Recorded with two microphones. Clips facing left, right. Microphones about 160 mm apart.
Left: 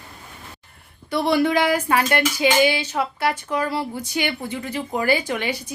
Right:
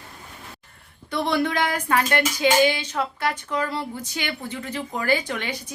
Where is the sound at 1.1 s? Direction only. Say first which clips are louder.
Left 4 dB; 10° left (ahead or behind).